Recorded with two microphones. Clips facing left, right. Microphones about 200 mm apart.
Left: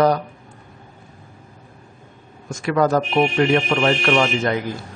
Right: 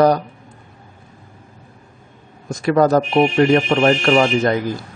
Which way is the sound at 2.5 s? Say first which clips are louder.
Right 4 dB; 35° right (ahead or behind).